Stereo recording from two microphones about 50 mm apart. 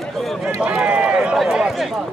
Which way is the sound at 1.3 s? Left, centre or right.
Centre.